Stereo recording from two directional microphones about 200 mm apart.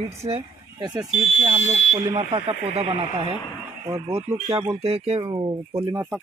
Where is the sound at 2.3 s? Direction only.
30° right (ahead or behind).